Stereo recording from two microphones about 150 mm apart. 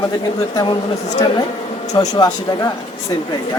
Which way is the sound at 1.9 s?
30° left (ahead or behind).